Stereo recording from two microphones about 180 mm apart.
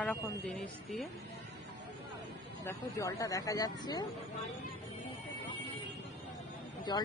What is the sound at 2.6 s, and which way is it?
Speech, 20° left (ahead or behind).